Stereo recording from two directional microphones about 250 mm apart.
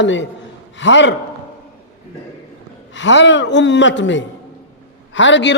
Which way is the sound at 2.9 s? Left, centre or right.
Left.